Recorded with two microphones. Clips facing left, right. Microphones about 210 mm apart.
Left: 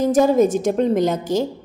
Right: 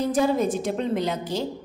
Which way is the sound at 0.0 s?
45° left (ahead or behind).